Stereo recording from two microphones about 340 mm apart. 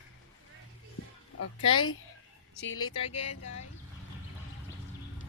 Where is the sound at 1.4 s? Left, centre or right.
Left.